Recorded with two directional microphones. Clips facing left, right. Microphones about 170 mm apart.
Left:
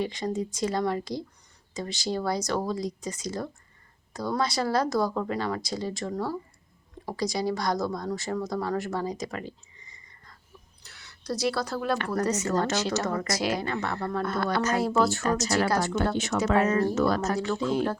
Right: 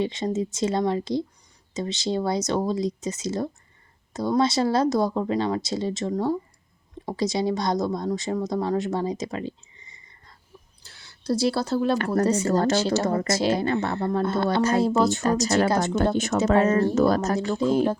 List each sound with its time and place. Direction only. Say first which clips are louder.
0.0 s a woman's voice: right 4 dB; 25° right (ahead or behind)
10.8 s speech: right 7 dB; 30° right (ahead or behind)
11.9 s speech: right 5 dB; 45° right (ahead or behind)
12.2 s a woman's voice: right 6 dB; 30° right (ahead or behind)
15.2 s speech: right 4 dB; 35° right (ahead or behind)
15.4 s a woman's voice: right 4 dB; 25° right (ahead or behind)
16.1 s speech: right 4 dB; 45° right (ahead or behind)
16.6 s speech: right 3 dB; 30° right (ahead or behind)